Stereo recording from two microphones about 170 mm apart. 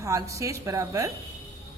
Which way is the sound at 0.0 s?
20° right (ahead or behind).